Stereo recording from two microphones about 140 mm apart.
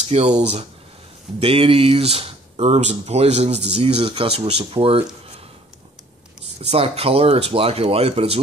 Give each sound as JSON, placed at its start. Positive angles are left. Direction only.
{"t": 0.1, "sound": "speech", "side_deg": -50}
{"t": 4.0, "sound": "speech", "side_deg": -35}
{"t": 6.6, "sound": "speech", "side_deg": -45}